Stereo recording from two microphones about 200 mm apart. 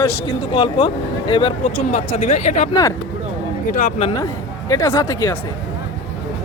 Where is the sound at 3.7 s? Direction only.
35° left (ahead or behind).